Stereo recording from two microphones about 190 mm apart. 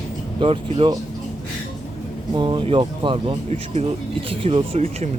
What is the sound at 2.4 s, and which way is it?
Speech, 25° right (ahead or behind).